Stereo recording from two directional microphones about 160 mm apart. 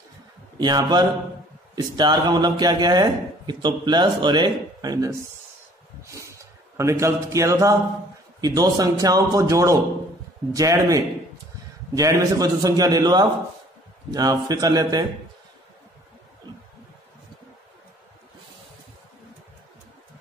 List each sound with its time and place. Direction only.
0.6 s speech: 25° right (ahead or behind)
6.1 s a man's voice: 20° right (ahead or behind)